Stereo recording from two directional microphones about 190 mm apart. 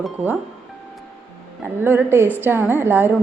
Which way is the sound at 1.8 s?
10° right (ahead or behind).